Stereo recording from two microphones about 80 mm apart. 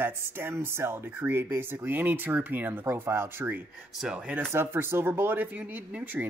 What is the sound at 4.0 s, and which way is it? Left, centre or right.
Speech, centre.